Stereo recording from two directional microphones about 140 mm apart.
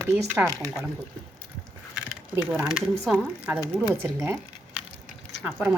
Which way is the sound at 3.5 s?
15° right (ahead or behind).